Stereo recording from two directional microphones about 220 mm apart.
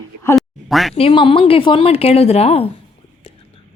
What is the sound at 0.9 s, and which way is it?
Speech, 25° left (ahead or behind).